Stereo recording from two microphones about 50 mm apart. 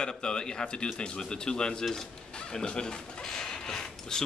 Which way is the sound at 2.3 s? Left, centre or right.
Centre.